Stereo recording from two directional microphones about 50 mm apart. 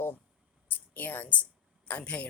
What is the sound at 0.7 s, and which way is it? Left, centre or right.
Speech, left.